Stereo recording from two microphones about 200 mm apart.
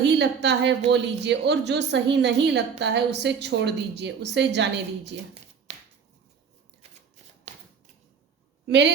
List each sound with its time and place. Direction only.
0.0 s a woman's voice: 60° right (ahead or behind)
5.7 s finger snapping: 35° right (ahead or behind)
7.5 s shuffling cards: 35° right (ahead or behind)
8.6 s a woman's voice: 60° right (ahead or behind)